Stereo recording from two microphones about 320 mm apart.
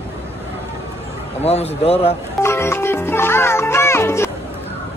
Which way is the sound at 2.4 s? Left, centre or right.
Centre.